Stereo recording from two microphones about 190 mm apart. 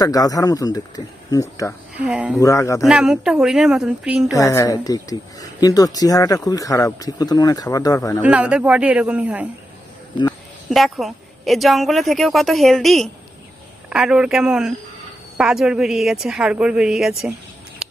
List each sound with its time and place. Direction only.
0.0 s speech: 20° left (ahead or behind)
2.0 s speech: 5° right (ahead or behind)
2.4 s speech: 15° left (ahead or behind)
2.9 s a woman's voice: 5° right (ahead or behind)
4.3 s speech: 15° left (ahead or behind)
8.2 s speech: 5° right (ahead or behind)
10.7 s a woman's voice: centre (ahead or behind)